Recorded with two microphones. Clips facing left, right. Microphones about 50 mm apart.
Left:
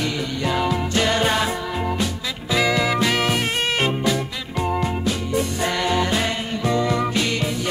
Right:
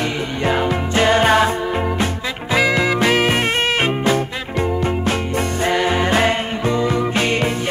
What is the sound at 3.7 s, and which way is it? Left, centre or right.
Swing music, right.